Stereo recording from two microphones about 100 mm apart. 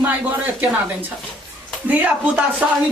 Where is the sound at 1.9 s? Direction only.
15° right (ahead or behind).